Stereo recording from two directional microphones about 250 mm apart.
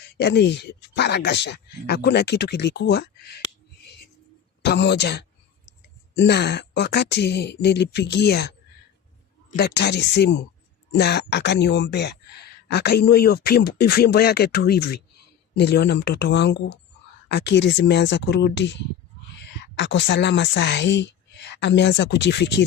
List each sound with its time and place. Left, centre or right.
0.2 s speech: left
4.6 s speech: left
9.6 s speech: left